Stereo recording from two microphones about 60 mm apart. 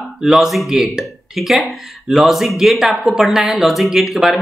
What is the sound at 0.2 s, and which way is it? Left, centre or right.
Speech, centre.